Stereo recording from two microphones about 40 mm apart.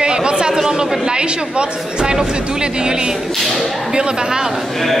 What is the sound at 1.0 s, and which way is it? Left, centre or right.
A woman's voice, right.